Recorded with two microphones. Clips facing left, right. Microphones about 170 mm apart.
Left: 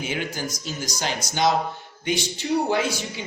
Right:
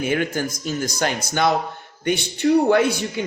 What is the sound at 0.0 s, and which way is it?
A man's voice, 55° right (ahead or behind).